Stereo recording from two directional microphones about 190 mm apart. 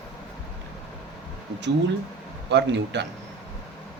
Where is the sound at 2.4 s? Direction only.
65° right (ahead or behind).